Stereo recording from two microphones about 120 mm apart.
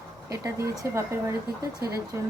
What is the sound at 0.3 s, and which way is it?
A woman's voice, 25° right (ahead or behind).